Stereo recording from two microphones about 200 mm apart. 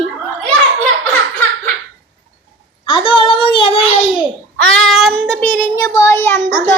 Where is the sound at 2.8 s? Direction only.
25° left (ahead or behind).